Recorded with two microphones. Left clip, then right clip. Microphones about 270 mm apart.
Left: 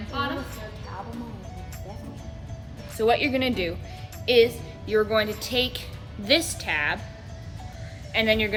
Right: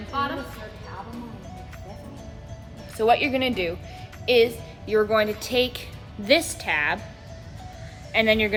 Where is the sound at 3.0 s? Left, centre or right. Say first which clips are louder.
Right 2 dB; right.